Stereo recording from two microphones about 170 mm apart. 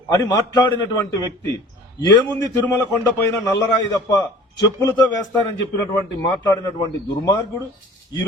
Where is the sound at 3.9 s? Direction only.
20° left (ahead or behind).